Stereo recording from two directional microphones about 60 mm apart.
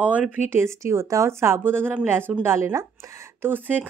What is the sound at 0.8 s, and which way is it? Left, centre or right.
Speech, right.